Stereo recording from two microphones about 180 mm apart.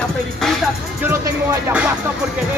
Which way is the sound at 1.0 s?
15° right (ahead or behind).